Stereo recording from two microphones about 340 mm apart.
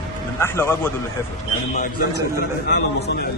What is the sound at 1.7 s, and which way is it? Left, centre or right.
A man's voice, left.